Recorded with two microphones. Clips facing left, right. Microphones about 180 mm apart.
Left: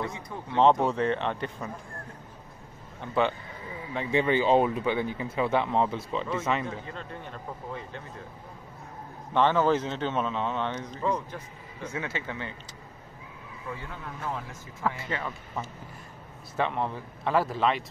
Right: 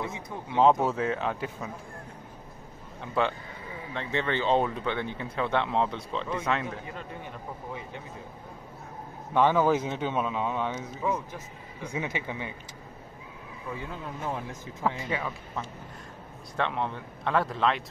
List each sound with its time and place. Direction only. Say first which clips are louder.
0.6 s speech: even; 5° right (ahead or behind)
3.0 s speech: left 2 dB; centre (ahead or behind)
6.9 s a man's voice: even; 10° right (ahead or behind)
9.3 s a man's voice: even; 10° right (ahead or behind)
13.8 s speech: right 3 dB; 20° right (ahead or behind)
16.5 s speech: left 1 dB; 5° left (ahead or behind)